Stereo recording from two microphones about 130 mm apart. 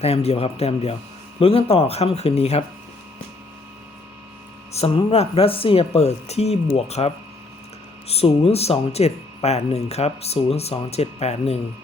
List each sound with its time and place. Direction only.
0.0 s speech: 50° left (ahead or behind)
4.9 s speech: 50° left (ahead or behind)